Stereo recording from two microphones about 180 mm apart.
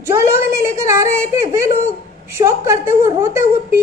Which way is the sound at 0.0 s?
15° right (ahead or behind).